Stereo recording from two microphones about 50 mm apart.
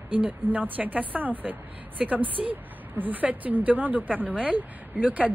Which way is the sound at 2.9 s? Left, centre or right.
Right.